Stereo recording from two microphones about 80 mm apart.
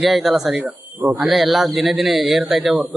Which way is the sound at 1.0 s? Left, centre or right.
Right.